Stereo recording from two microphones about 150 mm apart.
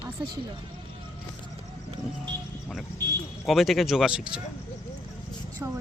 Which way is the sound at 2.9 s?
25° right (ahead or behind).